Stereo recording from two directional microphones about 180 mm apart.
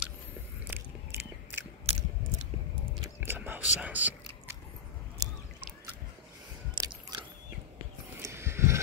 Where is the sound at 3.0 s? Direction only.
15° right (ahead or behind).